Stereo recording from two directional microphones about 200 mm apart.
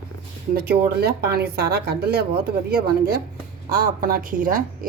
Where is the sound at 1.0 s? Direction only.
50° right (ahead or behind).